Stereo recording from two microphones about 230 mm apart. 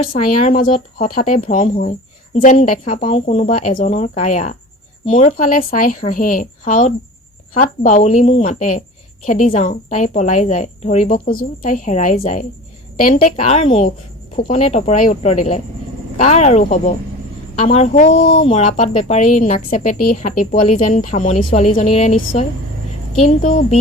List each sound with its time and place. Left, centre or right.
0.4 s a woman's voice: left